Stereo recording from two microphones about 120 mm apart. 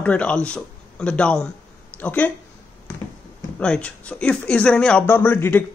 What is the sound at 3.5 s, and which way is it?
Speech, 10° left (ahead or behind).